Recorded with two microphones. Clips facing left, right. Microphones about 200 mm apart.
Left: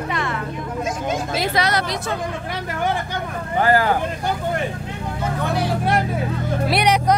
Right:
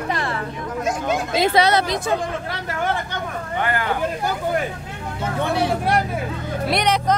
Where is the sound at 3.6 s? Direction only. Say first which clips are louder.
Left 7 dB; 35° left (ahead or behind).